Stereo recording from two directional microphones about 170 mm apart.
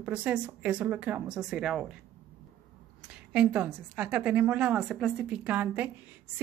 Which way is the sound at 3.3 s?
5° right (ahead or behind).